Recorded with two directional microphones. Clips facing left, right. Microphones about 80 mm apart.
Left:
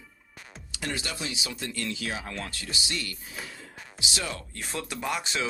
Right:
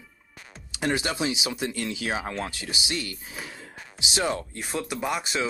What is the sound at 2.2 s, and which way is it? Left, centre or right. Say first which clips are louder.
Speech: right 5 dB; right.